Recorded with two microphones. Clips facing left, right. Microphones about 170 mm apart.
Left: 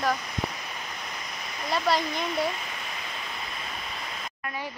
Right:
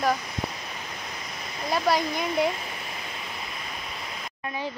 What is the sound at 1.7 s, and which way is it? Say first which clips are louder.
Speech: right 2 dB; 10° right (ahead or behind).